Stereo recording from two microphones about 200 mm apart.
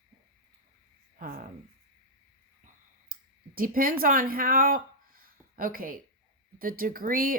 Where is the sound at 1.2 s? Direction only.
50° right (ahead or behind).